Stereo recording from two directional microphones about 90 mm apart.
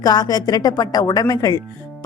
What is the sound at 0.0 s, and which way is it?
A woman's voice, 45° left (ahead or behind).